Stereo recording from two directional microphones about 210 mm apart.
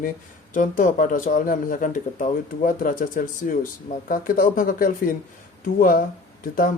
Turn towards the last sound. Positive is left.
turn(degrees=40)  # may be behind; listen again after turning